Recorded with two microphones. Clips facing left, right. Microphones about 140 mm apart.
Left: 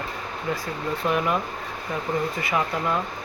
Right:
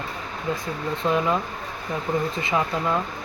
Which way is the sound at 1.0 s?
25° right (ahead or behind).